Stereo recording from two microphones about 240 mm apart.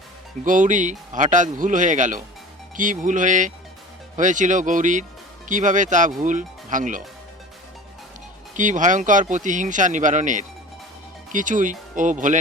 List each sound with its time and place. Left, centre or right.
0.4 s speech: right
8.5 s speech: right